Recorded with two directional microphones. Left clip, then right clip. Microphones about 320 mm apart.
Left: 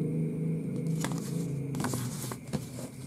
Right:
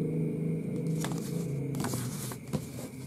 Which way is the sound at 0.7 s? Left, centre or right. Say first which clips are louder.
Even; centre.